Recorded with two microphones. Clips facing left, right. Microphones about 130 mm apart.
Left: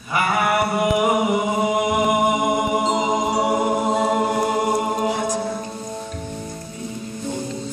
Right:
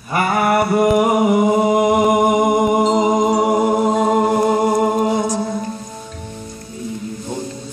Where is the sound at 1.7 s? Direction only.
45° right (ahead or behind).